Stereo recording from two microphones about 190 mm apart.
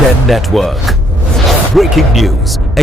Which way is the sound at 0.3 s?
Centre (ahead or behind).